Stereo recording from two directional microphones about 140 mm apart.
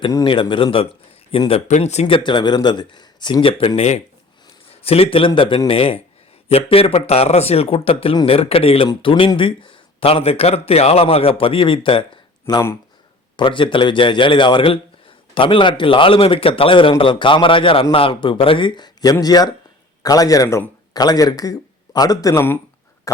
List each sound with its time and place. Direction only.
0.3 s speech: 35° left (ahead or behind)
1.5 s a man's voice: 50° left (ahead or behind); by 23.2 s 20° left (ahead or behind)